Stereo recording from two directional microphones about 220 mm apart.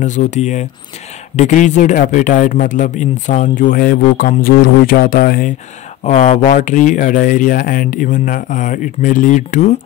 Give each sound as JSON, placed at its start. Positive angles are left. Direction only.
{"t": 0.0, "sound": "speech", "side_deg": 35}